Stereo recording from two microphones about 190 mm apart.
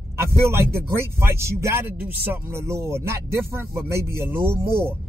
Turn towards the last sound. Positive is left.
turn(degrees=-15)  # may be behind; listen again after turning